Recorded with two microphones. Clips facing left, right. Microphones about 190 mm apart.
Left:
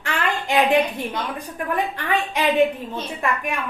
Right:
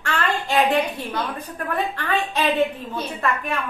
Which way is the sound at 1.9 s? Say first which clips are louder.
Even; 15° left (ahead or behind).